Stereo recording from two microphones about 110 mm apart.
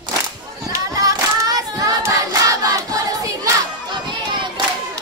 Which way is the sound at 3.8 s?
50° right (ahead or behind).